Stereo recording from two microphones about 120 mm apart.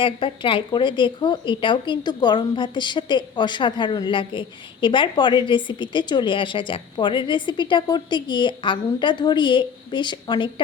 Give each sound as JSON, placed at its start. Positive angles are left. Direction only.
{"t": 0.0, "sound": "speech", "side_deg": 45}